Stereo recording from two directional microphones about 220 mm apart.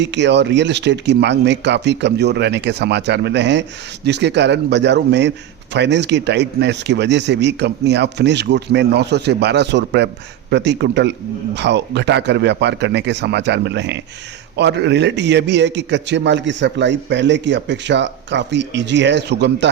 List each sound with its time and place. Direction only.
0.0 s a man's voice: 55° right (ahead or behind)